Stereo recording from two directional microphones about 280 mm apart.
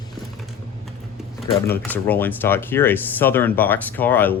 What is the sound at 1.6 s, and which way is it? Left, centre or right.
Speech, centre.